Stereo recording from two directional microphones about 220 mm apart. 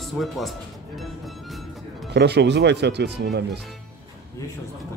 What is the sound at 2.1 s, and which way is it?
Speech, 50° right (ahead or behind).